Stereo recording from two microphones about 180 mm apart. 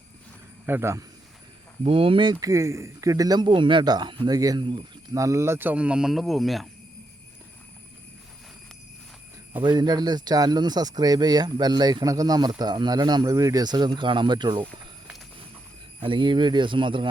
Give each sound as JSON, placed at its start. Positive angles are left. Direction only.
{"t": 0.6, "sound": "speech", "side_deg": -15}
{"t": 1.8, "sound": "speech", "side_deg": -30}
{"t": 9.6, "sound": "speech", "side_deg": -25}
{"t": 14.6, "sound": "a sound", "side_deg": -5}
{"t": 16.0, "sound": "speech", "side_deg": -25}